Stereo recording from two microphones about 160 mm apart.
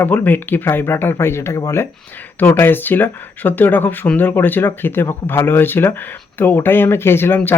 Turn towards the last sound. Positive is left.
turn(degrees=15)  # may be behind; listen again after turning